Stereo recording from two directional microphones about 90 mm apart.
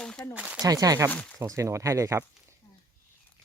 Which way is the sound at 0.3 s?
15° right (ahead or behind).